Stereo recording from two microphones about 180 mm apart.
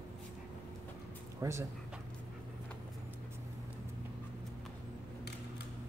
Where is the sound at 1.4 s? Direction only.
15° right (ahead or behind).